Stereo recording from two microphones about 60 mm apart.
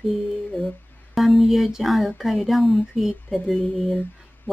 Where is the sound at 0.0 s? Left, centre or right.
Centre.